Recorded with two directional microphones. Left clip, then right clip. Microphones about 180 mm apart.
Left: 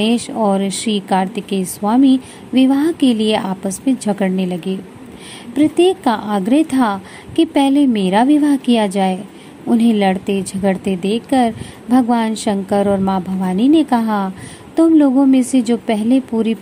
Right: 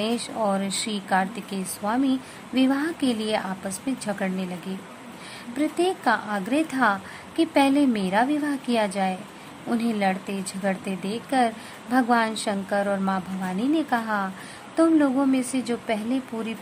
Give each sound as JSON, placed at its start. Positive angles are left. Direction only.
{"t": 0.0, "sound": "a woman's voice", "side_deg": 20}
{"t": 15.3, "sound": "a woman's voice", "side_deg": 20}